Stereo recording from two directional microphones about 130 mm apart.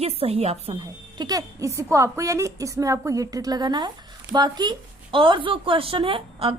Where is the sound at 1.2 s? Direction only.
30° right (ahead or behind).